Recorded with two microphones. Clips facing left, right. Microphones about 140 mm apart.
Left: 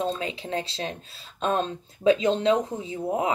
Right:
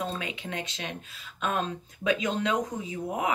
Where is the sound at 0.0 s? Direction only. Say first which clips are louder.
Left 5 dB; 30° left (ahead or behind).